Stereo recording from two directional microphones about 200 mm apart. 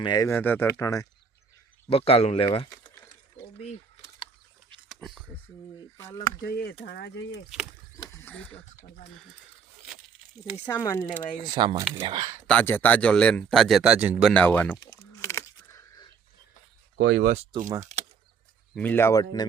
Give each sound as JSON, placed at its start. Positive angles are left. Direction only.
{"t": 0.0, "sound": "speech", "side_deg": 20}
{"t": 1.9, "sound": "speech", "side_deg": 30}
{"t": 2.5, "sound": "a sound", "side_deg": 15}
{"t": 4.9, "sound": "a sound", "side_deg": 0}
{"t": 6.4, "sound": "speech", "side_deg": 50}
{"t": 7.9, "sound": "horse", "side_deg": 10}
{"t": 10.7, "sound": "speech", "side_deg": 10}
{"t": 11.5, "sound": "speech", "side_deg": -20}
{"t": 12.5, "sound": "a man's voice", "side_deg": 10}
{"t": 14.3, "sound": "a sound", "side_deg": 5}
{"t": 17.0, "sound": "speech", "side_deg": -55}
{"t": 17.3, "sound": "speech", "side_deg": -30}
{"t": 18.8, "sound": "speech", "side_deg": 10}